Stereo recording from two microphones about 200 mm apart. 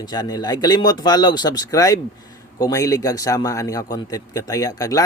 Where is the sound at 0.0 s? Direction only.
20° left (ahead or behind).